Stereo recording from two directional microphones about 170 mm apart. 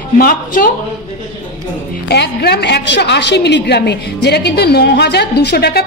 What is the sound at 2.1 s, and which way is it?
A woman's voice, 75° left (ahead or behind).